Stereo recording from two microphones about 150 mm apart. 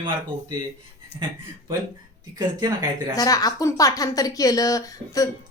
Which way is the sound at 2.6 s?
25° right (ahead or behind).